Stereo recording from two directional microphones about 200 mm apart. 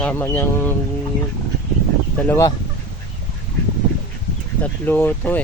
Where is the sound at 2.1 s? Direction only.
10° left (ahead or behind).